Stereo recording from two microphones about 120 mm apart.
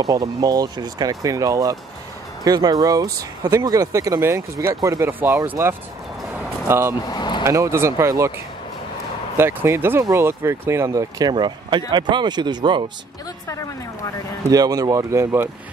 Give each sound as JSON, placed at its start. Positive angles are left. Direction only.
{"t": 0.0, "sound": "speech", "side_deg": -30}
{"t": 6.7, "sound": "speech", "side_deg": -20}
{"t": 7.1, "sound": "vehicle", "side_deg": 40}
{"t": 7.4, "sound": "speech", "side_deg": -25}
{"t": 9.4, "sound": "speech", "side_deg": -20}
{"t": 14.5, "sound": "speech", "side_deg": -30}